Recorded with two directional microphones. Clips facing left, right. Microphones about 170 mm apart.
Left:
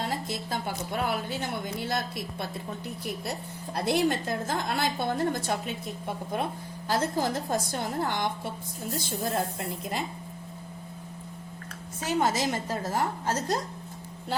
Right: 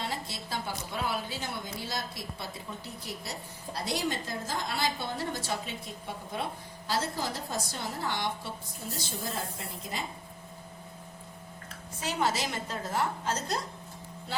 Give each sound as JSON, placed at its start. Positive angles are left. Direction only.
{"t": 0.0, "sound": "a sound", "side_deg": 45}
{"t": 1.0, "sound": "a woman's voice", "side_deg": 55}
{"t": 3.8, "sound": "a woman's voice", "side_deg": 55}
{"t": 12.0, "sound": "a woman's voice", "side_deg": 45}